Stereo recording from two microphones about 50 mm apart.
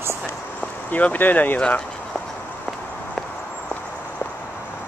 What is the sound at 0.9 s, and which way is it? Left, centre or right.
Speech, left.